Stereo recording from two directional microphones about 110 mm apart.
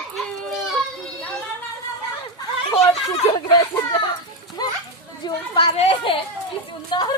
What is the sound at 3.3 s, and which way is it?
Speech, 40° left (ahead or behind).